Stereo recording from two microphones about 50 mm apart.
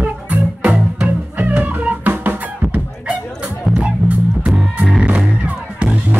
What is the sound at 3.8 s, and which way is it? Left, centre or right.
Music, right.